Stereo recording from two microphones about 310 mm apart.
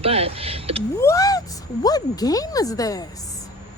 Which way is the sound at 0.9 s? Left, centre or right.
Centre.